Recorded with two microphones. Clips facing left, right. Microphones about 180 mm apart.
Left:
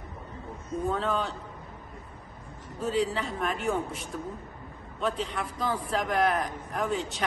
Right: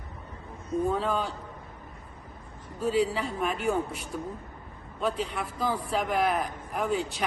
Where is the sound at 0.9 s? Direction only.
5° right (ahead or behind).